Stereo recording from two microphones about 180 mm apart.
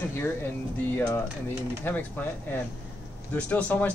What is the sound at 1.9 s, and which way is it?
Speech, 10° left (ahead or behind).